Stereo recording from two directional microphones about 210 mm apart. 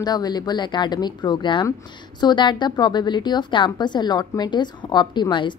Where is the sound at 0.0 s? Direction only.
20° left (ahead or behind).